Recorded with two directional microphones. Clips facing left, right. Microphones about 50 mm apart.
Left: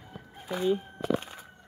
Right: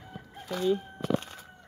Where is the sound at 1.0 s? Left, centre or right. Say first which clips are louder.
Even; centre.